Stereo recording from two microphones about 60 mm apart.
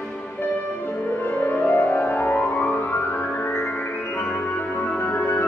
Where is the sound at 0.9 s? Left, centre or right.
Left.